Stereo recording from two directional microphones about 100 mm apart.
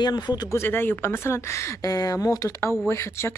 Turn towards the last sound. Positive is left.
turn(degrees=25)  # may be behind; listen again after turning